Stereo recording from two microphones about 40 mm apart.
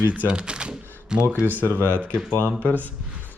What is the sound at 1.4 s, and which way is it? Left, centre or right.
Speech, right.